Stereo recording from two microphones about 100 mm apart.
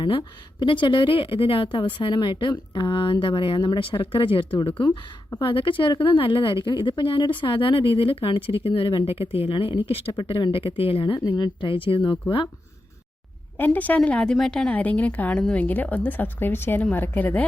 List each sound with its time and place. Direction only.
0.0 s a woman's voice: 55° left (ahead or behind)
6.7 s a woman's voice: 50° left (ahead or behind)
13.6 s a woman's voice: 15° left (ahead or behind)